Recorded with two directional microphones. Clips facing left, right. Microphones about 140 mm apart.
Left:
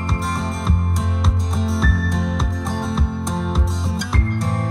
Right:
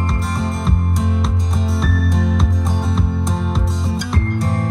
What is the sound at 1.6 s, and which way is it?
Music, centre (ahead or behind).